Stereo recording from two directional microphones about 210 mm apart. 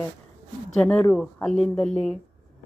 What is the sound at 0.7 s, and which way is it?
Speech, 5° left (ahead or behind).